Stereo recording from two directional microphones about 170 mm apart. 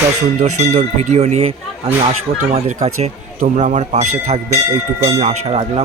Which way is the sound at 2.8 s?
40° right (ahead or behind).